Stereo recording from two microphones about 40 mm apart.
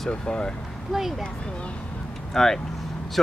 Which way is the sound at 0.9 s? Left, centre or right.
Centre.